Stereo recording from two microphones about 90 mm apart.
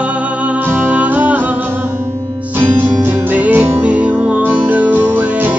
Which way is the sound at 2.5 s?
20° right (ahead or behind).